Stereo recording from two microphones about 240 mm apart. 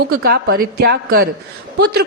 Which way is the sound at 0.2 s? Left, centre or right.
Right.